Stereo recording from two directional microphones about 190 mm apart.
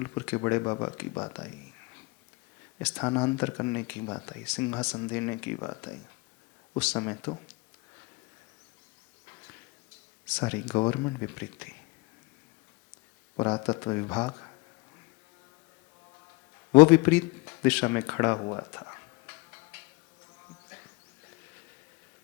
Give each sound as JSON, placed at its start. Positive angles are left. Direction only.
{"t": 0.0, "sound": "speech", "side_deg": 10}
{"t": 2.7, "sound": "speech", "side_deg": 5}
{"t": 9.2, "sound": "a sound", "side_deg": 15}
{"t": 10.2, "sound": "speech", "side_deg": 5}
{"t": 13.3, "sound": "speech", "side_deg": 10}
{"t": 16.7, "sound": "speech", "side_deg": 5}